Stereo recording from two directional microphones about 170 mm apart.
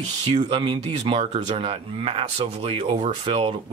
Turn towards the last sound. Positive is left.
turn(degrees=-35)  # may be behind; listen again after turning